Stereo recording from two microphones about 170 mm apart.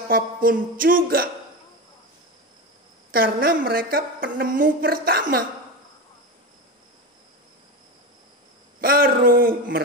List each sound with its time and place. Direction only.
0.1 s a woman's voice: 55° right (ahead or behind)
3.1 s a woman's voice: 60° right (ahead or behind)
8.8 s a sound: 60° right (ahead or behind)